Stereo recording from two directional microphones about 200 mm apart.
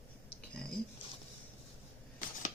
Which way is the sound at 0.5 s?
5° left (ahead or behind).